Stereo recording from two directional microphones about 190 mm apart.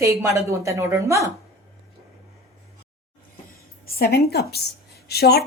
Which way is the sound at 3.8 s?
55° left (ahead or behind).